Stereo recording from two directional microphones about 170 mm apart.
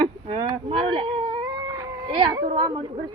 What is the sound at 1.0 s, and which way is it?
Cat, 25° right (ahead or behind).